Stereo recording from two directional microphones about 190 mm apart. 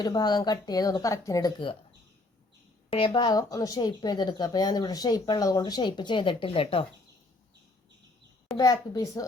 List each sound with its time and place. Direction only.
0.0 s speech: 20° left (ahead or behind)
3.1 s speech: 20° left (ahead or behind)
8.5 s speech: 20° left (ahead or behind)